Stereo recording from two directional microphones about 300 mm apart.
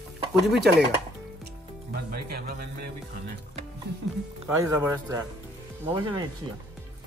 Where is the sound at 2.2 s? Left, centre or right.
Right.